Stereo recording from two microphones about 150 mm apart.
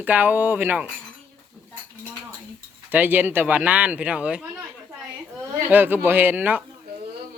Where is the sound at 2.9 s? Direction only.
10° right (ahead or behind).